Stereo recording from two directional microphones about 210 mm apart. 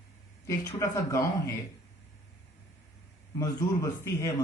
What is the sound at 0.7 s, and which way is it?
Speech, 15° left (ahead or behind).